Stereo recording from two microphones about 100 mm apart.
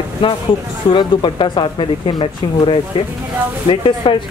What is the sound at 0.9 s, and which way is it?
Speech, 50° left (ahead or behind).